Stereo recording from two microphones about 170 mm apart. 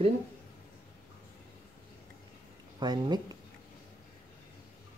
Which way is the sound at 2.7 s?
25° right (ahead or behind).